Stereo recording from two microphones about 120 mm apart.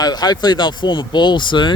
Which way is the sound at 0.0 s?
35° left (ahead or behind).